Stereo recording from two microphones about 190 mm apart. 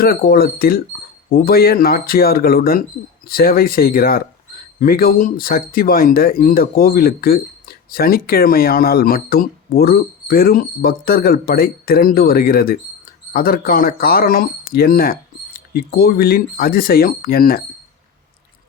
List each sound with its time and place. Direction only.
0.0 s speech: 50° left (ahead or behind)